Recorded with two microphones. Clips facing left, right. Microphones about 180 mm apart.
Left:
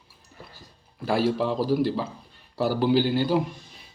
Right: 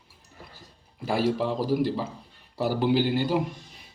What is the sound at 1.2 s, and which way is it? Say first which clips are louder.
Speech: left 1 dB; 5° left (ahead or behind).